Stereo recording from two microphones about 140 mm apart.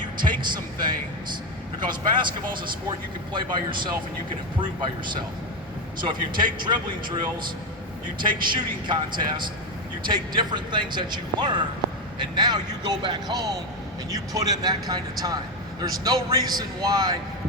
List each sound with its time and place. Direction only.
0.2 s a man's voice: 35° right (ahead or behind)
6.0 s a man's voice: 35° right (ahead or behind)
8.2 s a man's voice: 35° right (ahead or behind)